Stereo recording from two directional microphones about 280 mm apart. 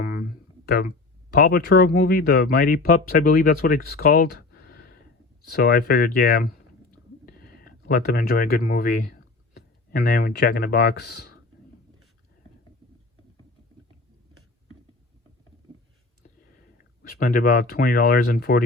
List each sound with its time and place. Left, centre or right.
0.0 s a sound: left
1.3 s speech: left
17.0 s speech: left